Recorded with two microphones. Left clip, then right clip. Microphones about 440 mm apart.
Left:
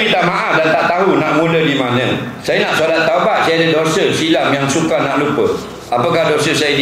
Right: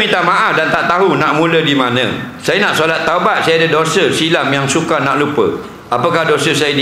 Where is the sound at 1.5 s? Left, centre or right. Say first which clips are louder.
Right 2 dB; right.